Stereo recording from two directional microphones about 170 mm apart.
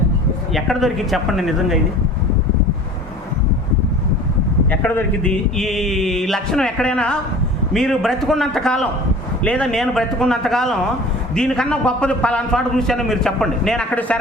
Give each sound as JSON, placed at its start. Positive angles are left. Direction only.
{"t": 0.5, "sound": "a man's voice", "side_deg": 0}
{"t": 4.7, "sound": "a man's voice", "side_deg": 10}